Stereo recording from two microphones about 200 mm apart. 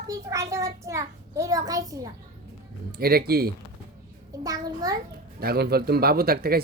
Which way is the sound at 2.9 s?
50° right (ahead or behind).